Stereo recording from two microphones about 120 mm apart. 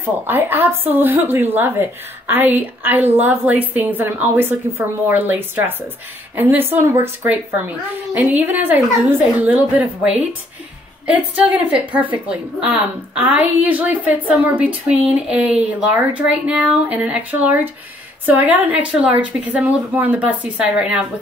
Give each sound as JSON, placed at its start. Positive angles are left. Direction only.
{"t": 0.0, "sound": "a woman's voice", "side_deg": -15}